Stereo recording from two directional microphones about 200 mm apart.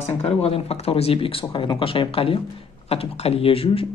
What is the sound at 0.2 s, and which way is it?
Speech, 30° left (ahead or behind).